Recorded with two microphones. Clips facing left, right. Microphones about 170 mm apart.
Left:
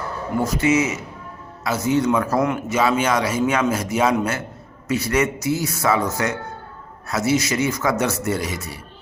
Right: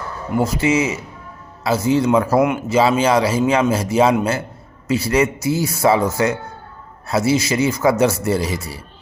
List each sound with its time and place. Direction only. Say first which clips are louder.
0.4 s a man's voice: even; 30° right (ahead or behind)